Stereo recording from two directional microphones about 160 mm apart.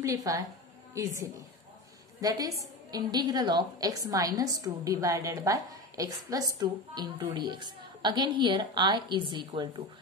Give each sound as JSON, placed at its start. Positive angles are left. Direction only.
{"t": 0.0, "sound": "a woman's voice", "side_deg": -20}
{"t": 2.2, "sound": "a woman's voice", "side_deg": -20}